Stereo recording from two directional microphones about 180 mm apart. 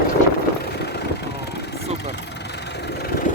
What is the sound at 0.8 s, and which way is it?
Vehicle, 65° left (ahead or behind).